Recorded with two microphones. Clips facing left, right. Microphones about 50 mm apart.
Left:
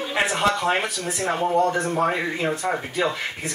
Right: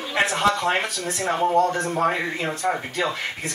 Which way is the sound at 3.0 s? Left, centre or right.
Centre.